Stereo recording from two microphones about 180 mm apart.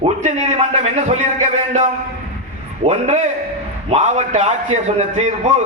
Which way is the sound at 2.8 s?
35° right (ahead or behind).